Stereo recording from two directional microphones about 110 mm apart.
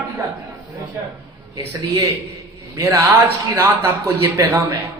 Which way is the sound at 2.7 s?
30° right (ahead or behind).